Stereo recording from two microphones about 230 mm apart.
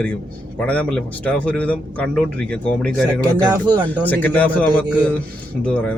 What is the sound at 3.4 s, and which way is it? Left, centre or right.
Speech, centre.